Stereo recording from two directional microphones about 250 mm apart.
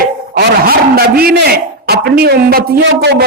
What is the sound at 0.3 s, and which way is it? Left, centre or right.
A man's voice, right.